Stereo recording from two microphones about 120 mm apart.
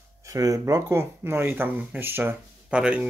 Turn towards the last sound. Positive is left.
turn(degrees=-10)  # may be behind; listen again after turning